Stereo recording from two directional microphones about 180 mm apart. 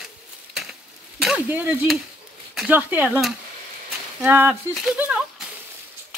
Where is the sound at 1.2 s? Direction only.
5° right (ahead or behind).